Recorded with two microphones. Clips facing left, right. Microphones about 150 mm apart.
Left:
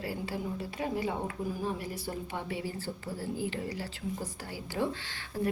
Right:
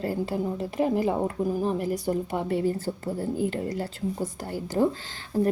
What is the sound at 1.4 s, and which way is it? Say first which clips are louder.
A woman's voice: right 8 dB; 50° right (ahead or behind).